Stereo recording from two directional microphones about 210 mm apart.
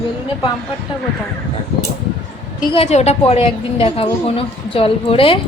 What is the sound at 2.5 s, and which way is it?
A woman's voice, 30° left (ahead or behind).